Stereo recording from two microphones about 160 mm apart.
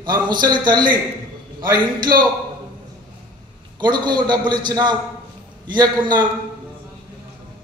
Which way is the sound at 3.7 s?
25° right (ahead or behind).